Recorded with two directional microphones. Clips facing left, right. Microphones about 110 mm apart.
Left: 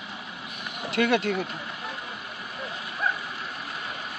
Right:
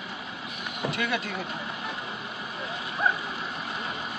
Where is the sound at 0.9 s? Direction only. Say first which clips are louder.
Left 10 dB; 75° left (ahead or behind).